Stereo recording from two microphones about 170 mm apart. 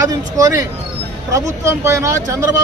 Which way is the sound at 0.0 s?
20° right (ahead or behind).